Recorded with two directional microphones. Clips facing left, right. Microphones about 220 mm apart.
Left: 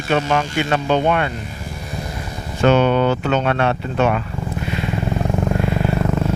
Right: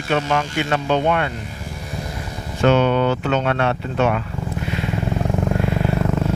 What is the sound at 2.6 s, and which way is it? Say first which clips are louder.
Speech: left 1 dB; 10° left (ahead or behind).